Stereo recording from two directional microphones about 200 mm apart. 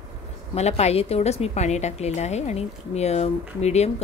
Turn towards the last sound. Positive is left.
turn(degrees=35)  # may be behind; listen again after turning